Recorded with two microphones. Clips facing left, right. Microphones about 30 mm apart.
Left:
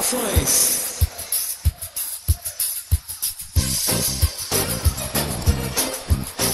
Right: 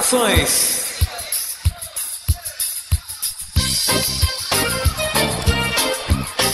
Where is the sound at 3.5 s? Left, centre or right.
Right.